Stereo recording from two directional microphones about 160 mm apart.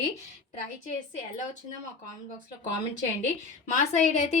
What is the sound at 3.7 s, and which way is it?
Speech, 45° left (ahead or behind).